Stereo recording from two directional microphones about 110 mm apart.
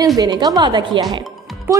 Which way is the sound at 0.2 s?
35° right (ahead or behind).